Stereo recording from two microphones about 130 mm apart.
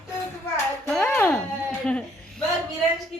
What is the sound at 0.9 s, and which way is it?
Music, 15° left (ahead or behind).